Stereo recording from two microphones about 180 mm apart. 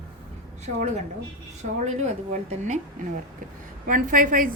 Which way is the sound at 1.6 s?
40° right (ahead or behind).